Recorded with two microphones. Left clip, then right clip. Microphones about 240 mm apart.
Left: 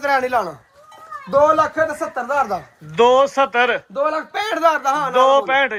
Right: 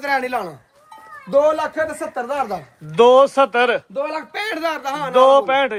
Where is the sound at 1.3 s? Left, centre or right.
Centre.